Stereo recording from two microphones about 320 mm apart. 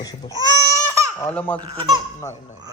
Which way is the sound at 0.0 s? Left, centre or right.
Centre.